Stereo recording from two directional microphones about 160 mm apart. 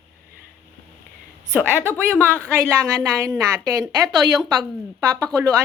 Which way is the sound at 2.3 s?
15° right (ahead or behind).